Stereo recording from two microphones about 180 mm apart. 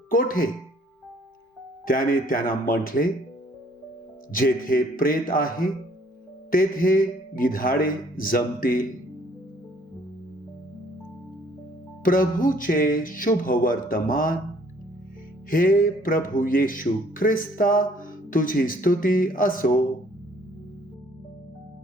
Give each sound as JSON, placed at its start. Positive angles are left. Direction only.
{"t": 0.1, "sound": "music", "side_deg": 50}
{"t": 1.9, "sound": "music", "side_deg": 50}
{"t": 4.3, "sound": "music", "side_deg": 50}
{"t": 12.0, "sound": "music", "side_deg": 50}
{"t": 15.4, "sound": "music", "side_deg": 50}